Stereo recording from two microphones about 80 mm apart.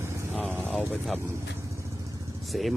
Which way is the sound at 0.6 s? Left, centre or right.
Centre.